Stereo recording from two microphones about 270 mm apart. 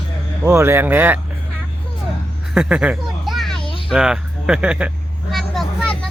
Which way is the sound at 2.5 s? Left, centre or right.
Centre.